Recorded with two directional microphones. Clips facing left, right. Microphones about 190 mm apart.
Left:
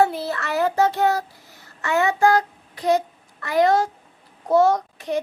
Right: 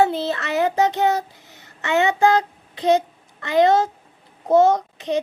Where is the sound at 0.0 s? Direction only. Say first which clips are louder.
Right 1 dB; 20° right (ahead or behind).